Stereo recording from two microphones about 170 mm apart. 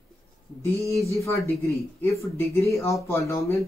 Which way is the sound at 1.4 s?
15° left (ahead or behind).